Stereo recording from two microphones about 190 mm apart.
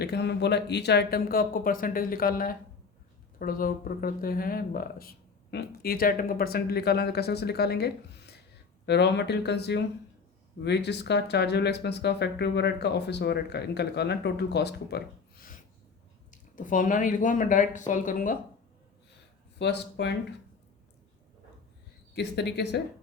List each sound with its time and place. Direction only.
0.0 s speech: 60° left (ahead or behind); by 18.3 s 45° left (ahead or behind)
19.5 s speech: 65° left (ahead or behind)
22.1 s speech: 65° left (ahead or behind)